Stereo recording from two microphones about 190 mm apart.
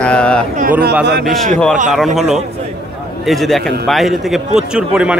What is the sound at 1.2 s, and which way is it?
Speech, centre (ahead or behind).